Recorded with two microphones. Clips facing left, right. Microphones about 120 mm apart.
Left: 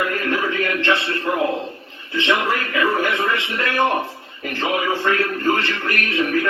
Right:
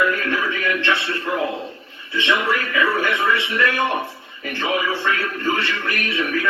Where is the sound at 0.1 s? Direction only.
45° left (ahead or behind).